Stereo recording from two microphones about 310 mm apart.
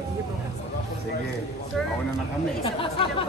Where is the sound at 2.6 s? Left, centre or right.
Centre.